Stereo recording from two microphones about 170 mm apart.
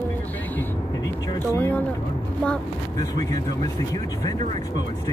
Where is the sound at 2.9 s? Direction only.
20° left (ahead or behind).